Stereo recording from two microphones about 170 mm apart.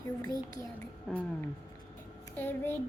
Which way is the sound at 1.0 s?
10° left (ahead or behind).